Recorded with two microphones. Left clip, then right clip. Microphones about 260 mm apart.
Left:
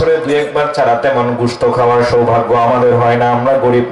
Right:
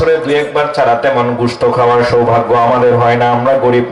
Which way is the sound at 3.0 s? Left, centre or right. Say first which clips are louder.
Right 1 dB; centre.